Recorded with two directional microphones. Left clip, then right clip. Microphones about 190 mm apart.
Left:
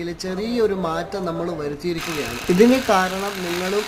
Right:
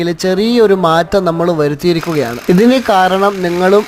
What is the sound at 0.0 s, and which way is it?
Speech, 40° right (ahead or behind).